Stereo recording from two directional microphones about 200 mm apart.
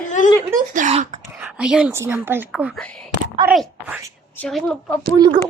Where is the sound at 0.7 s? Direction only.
35° right (ahead or behind).